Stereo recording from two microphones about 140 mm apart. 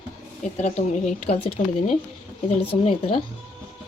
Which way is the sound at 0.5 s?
55° left (ahead or behind).